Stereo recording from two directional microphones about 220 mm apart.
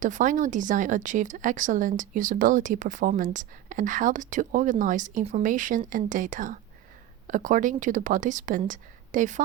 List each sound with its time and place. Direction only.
0.0 s speech: 35° right (ahead or behind)